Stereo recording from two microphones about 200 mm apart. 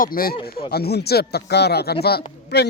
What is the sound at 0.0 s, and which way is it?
Speech, 45° left (ahead or behind).